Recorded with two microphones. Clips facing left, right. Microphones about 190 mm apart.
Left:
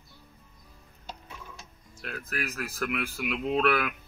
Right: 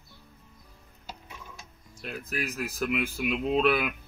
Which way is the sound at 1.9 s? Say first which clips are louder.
Right 2 dB; 15° right (ahead or behind).